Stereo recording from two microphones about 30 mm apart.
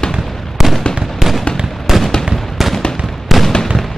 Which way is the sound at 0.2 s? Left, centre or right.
Centre.